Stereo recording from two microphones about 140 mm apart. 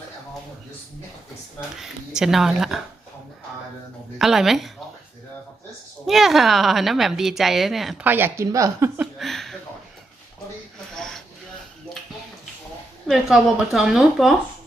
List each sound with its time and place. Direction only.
1.8 s a woman's voice: 5° right (ahead or behind)
4.2 s a woman's voice: centre (ahead or behind)
6.1 s a woman's voice: centre (ahead or behind)
8.0 s speech: 15° right (ahead or behind)
9.0 s a sound: centre (ahead or behind)
10.9 s a sound: 5° left (ahead or behind)
13.1 s a woman's voice: centre (ahead or behind)